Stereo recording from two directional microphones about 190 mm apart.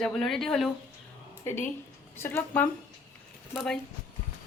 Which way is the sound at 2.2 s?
10° left (ahead or behind).